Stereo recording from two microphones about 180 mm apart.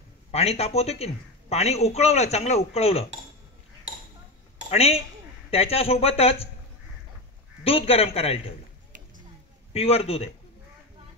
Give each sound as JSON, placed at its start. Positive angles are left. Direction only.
{"t": 0.3, "sound": "a woman's voice", "side_deg": 35}
{"t": 4.6, "sound": "a woman's voice", "side_deg": 35}
{"t": 7.6, "sound": "a woman's voice", "side_deg": 35}
{"t": 9.7, "sound": "a woman's voice", "side_deg": 35}